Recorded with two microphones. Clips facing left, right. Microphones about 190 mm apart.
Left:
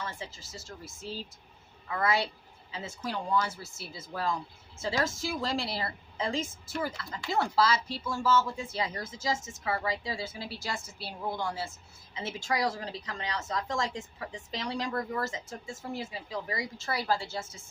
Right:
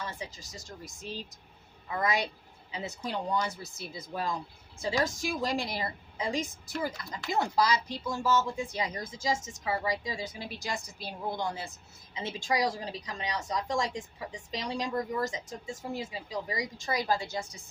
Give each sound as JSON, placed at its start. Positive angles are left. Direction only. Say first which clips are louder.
{"t": 0.0, "sound": "a woman's voice", "louder": "even", "side_deg": -15}